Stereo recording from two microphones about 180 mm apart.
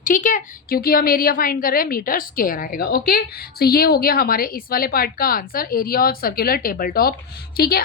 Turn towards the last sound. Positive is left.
turn(degrees=55)  # may be behind; listen again after turning